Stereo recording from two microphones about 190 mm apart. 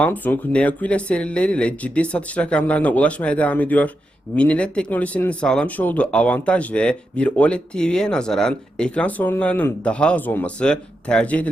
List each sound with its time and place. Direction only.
0.0 s speech: 10° left (ahead or behind)